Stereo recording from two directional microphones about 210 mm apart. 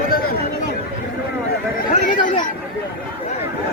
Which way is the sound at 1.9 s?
35° left (ahead or behind).